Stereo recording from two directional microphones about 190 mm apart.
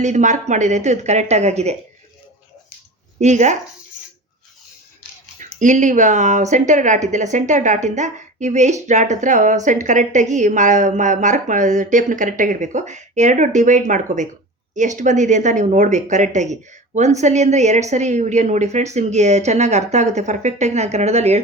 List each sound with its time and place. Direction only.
0.0 s a woman's voice: 40° right (ahead or behind)
3.2 s a woman's voice: 40° right (ahead or behind)
5.4 s a woman's voice: 40° right (ahead or behind)